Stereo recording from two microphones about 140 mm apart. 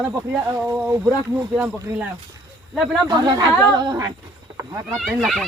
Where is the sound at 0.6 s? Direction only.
10° right (ahead or behind).